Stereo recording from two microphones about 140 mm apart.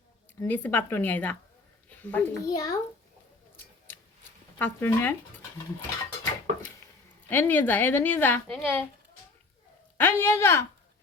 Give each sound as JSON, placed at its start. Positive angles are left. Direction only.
{"t": 0.3, "sound": "speech", "side_deg": 15}
{"t": 1.9, "sound": "a sound", "side_deg": 10}
{"t": 2.4, "sound": "a child's voice", "side_deg": 25}
{"t": 4.5, "sound": "speech", "side_deg": 15}
{"t": 7.3, "sound": "speech", "side_deg": 15}
{"t": 10.0, "sound": "speech", "side_deg": 15}